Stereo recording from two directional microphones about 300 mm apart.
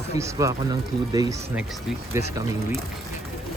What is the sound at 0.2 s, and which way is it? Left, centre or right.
Speech, centre.